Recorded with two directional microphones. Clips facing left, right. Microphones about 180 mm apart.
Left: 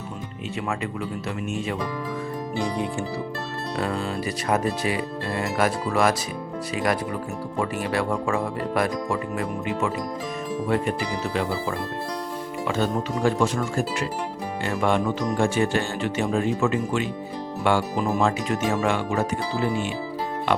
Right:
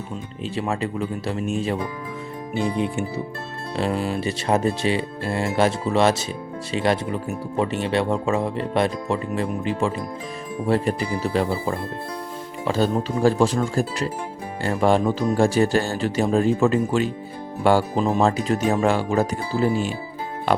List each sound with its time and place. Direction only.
0.5 s speech: 30° right (ahead or behind)
2.6 s speech: 20° right (ahead or behind); by 11.4 s 35° right (ahead or behind)
12.6 s speech: 35° right (ahead or behind)
18.0 s speech: 25° right (ahead or behind)